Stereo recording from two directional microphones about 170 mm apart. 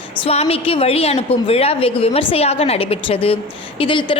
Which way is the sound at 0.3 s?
35° left (ahead or behind).